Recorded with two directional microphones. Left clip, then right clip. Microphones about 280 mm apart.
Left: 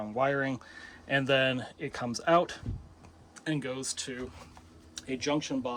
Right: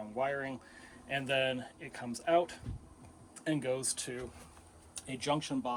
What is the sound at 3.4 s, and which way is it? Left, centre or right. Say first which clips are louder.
Speech: even; centre.